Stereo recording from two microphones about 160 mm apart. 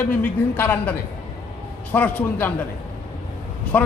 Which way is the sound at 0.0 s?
10° left (ahead or behind).